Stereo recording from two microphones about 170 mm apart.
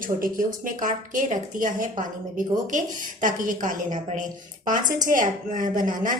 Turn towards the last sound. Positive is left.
turn(degrees=-50)  # may be behind; listen again after turning